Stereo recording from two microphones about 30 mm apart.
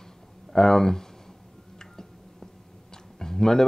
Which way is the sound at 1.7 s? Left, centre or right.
Left.